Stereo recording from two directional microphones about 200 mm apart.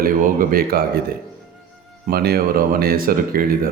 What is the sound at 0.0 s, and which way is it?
Speech, 45° right (ahead or behind).